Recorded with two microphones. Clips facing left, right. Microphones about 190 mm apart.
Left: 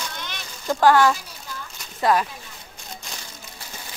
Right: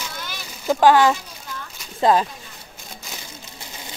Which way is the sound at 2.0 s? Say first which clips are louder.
Right 3 dB; 25° right (ahead or behind).